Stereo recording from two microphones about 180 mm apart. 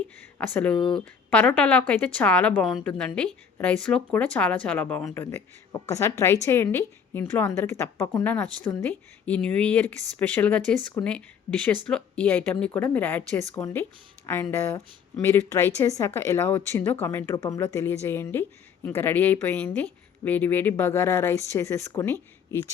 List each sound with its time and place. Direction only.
0.3 s a woman's voice: 10° left (ahead or behind)